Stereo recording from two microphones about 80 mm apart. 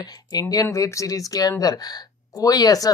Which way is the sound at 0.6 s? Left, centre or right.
Left.